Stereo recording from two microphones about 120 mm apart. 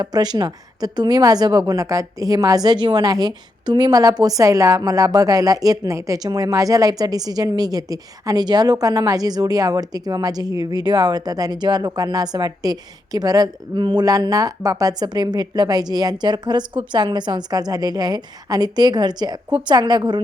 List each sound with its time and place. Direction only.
0.0 s a woman's voice: 35° right (ahead or behind)